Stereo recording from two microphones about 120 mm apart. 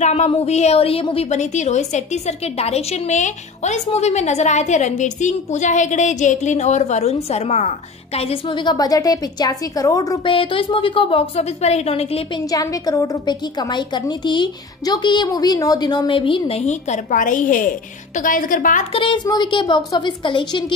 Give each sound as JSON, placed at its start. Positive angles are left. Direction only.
{"t": 0.0, "sound": "a woman's voice", "side_deg": 70}
{"t": 1.4, "sound": "a woman's voice", "side_deg": 75}
{"t": 10.2, "sound": "a woman's voice", "side_deg": 45}
{"t": 12.4, "sound": "a woman's voice", "side_deg": 30}
{"t": 18.9, "sound": "a woman's voice", "side_deg": 45}